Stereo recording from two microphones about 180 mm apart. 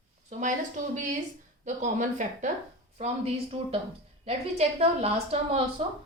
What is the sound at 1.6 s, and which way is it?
A woman's voice, 45° right (ahead or behind).